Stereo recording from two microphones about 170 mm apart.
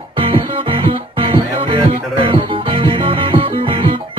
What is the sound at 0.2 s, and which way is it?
Music, 30° right (ahead or behind).